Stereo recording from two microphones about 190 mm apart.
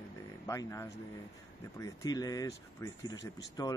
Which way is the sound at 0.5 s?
15° left (ahead or behind).